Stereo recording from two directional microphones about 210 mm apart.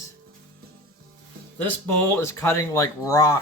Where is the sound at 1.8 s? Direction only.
15° left (ahead or behind).